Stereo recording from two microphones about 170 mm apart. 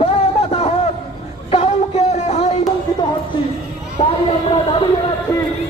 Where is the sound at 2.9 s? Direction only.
20° left (ahead or behind).